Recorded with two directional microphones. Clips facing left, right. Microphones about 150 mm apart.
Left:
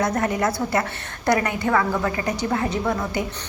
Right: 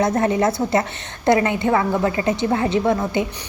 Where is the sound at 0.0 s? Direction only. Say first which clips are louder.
Right 4 dB; 25° right (ahead or behind).